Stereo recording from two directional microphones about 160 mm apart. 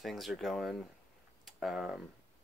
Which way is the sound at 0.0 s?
Centre (ahead or behind).